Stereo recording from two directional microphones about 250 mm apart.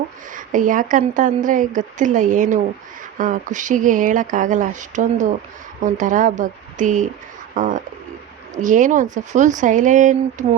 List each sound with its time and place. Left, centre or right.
0.3 s a woman's voice: right